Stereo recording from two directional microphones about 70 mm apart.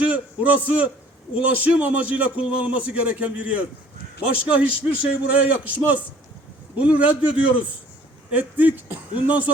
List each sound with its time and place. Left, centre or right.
0.0 s a man's voice: centre